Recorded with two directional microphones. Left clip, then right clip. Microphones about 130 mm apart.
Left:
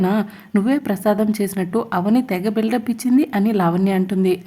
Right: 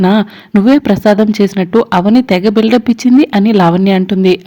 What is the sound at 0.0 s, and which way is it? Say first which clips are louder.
A woman's voice: right 9 dB; 35° right (ahead or behind).